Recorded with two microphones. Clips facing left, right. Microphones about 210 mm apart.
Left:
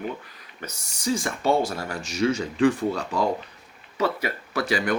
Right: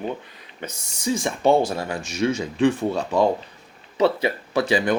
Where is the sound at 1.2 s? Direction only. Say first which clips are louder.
Right 6 dB; 20° right (ahead or behind).